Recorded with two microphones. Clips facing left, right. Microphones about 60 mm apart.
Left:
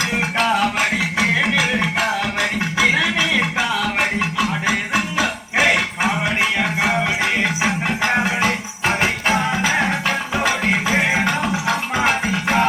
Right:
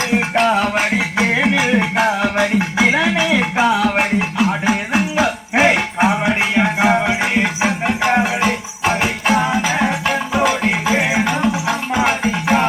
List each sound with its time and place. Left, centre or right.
0.1 s music: right
1.2 s music: right
2.9 s a sound: right
5.1 s music: right
8.1 s music: centre